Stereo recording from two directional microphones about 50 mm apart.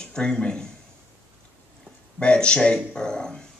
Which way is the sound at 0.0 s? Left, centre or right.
Centre.